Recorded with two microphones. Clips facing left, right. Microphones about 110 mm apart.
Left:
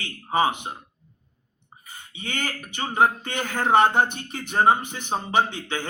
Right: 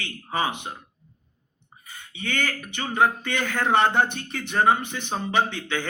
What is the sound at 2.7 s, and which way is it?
Speech, 30° left (ahead or behind).